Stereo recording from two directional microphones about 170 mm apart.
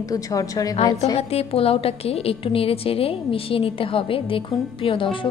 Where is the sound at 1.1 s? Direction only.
35° left (ahead or behind).